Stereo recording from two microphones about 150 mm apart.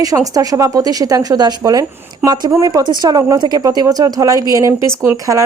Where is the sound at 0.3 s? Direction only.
20° right (ahead or behind).